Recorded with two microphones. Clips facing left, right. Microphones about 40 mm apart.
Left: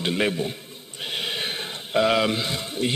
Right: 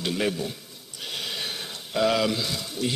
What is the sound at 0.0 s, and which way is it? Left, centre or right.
A man's voice, left.